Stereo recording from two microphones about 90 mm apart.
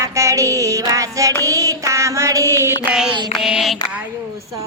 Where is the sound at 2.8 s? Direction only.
10° right (ahead or behind).